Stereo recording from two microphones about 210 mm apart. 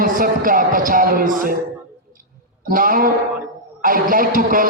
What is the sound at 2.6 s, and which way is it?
Speech, 40° right (ahead or behind).